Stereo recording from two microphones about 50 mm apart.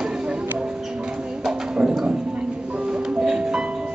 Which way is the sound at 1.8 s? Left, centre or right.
Centre.